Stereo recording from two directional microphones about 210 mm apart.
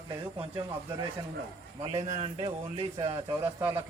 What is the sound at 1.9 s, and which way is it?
Speech, 30° right (ahead or behind).